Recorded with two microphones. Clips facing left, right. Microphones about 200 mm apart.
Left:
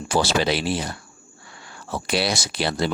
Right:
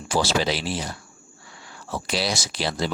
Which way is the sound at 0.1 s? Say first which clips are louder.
Left 2 dB; 60° left (ahead or behind).